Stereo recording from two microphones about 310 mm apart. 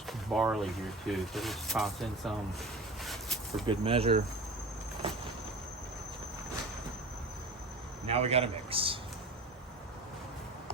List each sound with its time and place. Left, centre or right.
0.1 s speech: centre
3.0 s a sound: centre
3.7 s speech: centre
8.1 s a man's voice: centre